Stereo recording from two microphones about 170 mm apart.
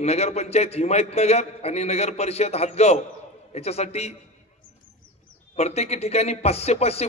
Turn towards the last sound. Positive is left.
turn(degrees=40)  # may be behind; listen again after turning